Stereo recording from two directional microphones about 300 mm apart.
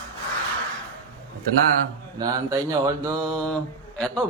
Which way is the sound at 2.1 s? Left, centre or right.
Centre.